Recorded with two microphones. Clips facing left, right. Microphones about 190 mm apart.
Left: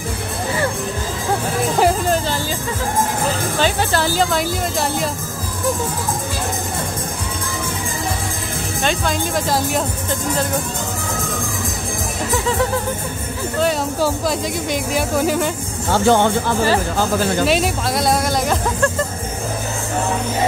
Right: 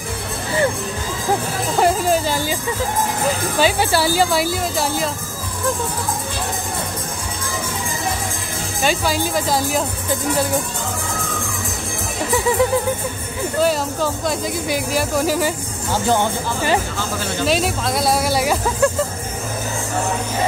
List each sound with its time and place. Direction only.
1.8 s music: centre (ahead or behind)
3.5 s speech: 10° right (ahead or behind)
8.8 s speech: 5° right (ahead or behind)
14.7 s speech: centre (ahead or behind)
15.9 s speech: 65° left (ahead or behind)
17.5 s speech: centre (ahead or behind)